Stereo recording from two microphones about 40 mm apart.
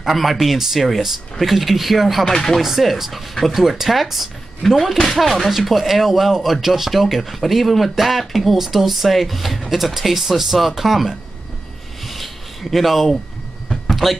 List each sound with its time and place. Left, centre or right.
0.0 s speech: centre
2.2 s speech: centre
2.6 s speech: centre
12.0 s a sound: centre
12.7 s speech: centre
13.7 s a sound: centre